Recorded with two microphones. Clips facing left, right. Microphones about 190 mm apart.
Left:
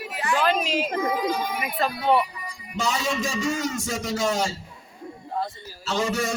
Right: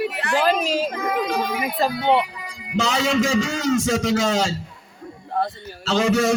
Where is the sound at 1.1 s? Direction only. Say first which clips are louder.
Right 3 dB; 75° right (ahead or behind).